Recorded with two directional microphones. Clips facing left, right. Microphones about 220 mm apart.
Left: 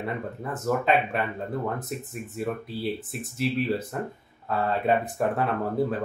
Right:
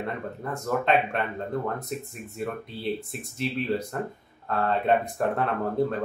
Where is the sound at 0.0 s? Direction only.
5° left (ahead or behind).